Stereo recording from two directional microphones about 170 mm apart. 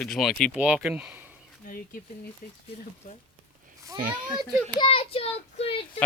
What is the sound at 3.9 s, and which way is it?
Speech, 55° right (ahead or behind).